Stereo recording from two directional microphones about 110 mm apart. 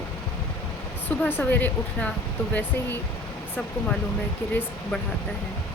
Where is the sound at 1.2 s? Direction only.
20° left (ahead or behind).